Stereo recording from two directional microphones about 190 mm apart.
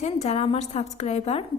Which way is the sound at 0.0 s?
35° left (ahead or behind).